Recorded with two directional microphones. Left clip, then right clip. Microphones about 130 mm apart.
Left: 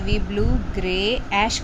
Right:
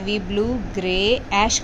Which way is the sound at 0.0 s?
20° right (ahead or behind).